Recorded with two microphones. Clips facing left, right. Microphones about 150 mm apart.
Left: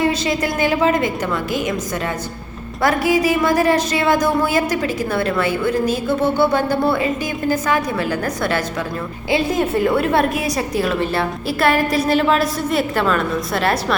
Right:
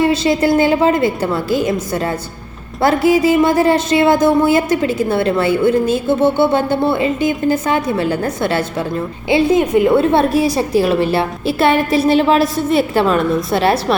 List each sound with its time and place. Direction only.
0.0 s a woman's voice: 30° right (ahead or behind)
12.0 s a woman's voice: centre (ahead or behind)
12.9 s a woman's voice: 30° right (ahead or behind)